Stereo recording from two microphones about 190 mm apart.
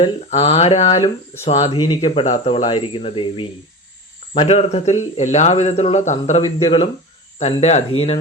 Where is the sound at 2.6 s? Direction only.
25° left (ahead or behind).